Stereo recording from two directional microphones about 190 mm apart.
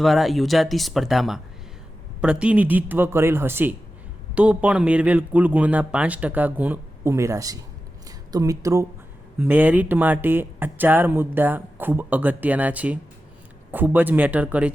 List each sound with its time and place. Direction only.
0.0 s speech: centre (ahead or behind)